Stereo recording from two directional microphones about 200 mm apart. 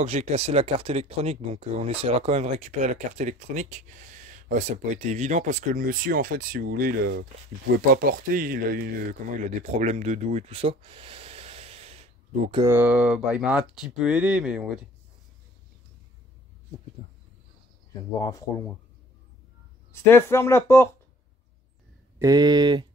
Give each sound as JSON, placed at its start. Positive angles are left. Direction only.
{"t": 0.0, "sound": "speech", "side_deg": -35}
{"t": 12.6, "sound": "speech", "side_deg": -10}
{"t": 18.2, "sound": "speech", "side_deg": 15}
{"t": 19.9, "sound": "speech", "side_deg": 10}
{"t": 22.2, "sound": "speech", "side_deg": -20}